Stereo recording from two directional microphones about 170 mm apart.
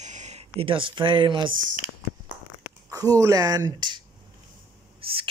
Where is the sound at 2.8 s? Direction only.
20° right (ahead or behind).